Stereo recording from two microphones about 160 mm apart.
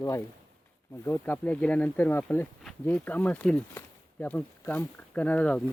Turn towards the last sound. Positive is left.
turn(degrees=10)  # may be behind; listen again after turning